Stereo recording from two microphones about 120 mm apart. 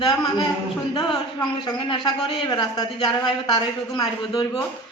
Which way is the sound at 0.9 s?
40° left (ahead or behind).